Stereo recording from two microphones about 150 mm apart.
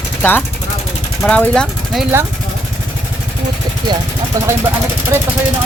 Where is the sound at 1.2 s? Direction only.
10° left (ahead or behind).